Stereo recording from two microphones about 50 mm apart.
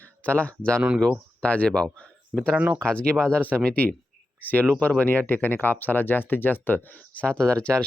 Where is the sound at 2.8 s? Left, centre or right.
Centre.